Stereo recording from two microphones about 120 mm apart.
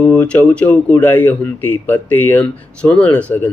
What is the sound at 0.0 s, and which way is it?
Speech, 10° left (ahead or behind).